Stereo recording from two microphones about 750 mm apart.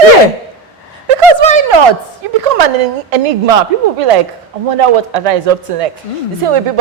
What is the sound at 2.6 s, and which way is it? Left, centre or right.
A man's voice, right.